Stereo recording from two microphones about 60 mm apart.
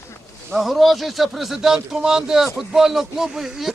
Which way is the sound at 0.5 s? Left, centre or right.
Centre.